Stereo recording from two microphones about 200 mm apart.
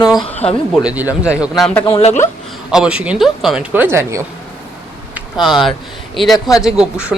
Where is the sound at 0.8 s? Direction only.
10° right (ahead or behind).